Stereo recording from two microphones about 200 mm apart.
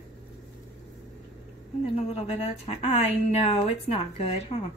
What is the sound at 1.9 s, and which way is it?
A woman's voice, 30° left (ahead or behind).